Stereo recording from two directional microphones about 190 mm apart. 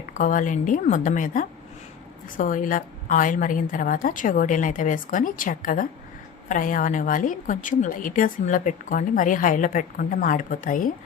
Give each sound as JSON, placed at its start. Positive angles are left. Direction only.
{"t": 0.1, "sound": "a woman's voice", "side_deg": 45}